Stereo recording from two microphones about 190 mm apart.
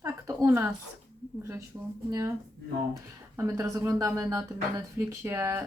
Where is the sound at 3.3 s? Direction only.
15° right (ahead or behind).